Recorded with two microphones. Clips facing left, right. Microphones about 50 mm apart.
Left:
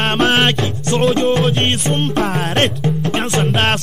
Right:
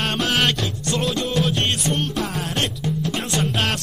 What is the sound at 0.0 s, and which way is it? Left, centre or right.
Music, left.